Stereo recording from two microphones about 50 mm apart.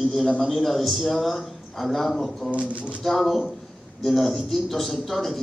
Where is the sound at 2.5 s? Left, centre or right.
Right.